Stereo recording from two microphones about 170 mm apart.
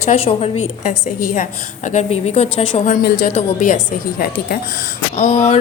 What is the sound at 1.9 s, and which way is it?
A woman's voice, 40° left (ahead or behind).